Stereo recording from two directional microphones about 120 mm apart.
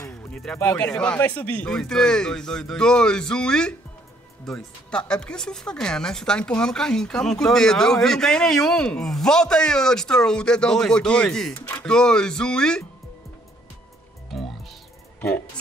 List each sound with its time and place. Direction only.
0.1 s music: 5° left (ahead or behind)
0.6 s speech: 20° left (ahead or behind)
11.5 s speech: 25° left (ahead or behind)
11.8 s speech: 5° left (ahead or behind)
14.3 s music: centre (ahead or behind)
15.1 s speech: 15° left (ahead or behind)